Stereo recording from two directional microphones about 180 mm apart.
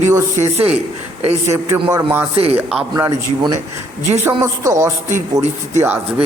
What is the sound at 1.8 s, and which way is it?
Speech, 20° right (ahead or behind).